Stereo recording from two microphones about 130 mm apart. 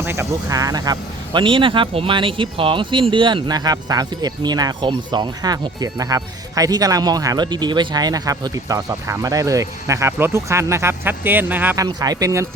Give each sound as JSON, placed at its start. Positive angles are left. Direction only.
{"t": 0.0, "sound": "speech", "side_deg": -20}
{"t": 11.8, "sound": "speech", "side_deg": -30}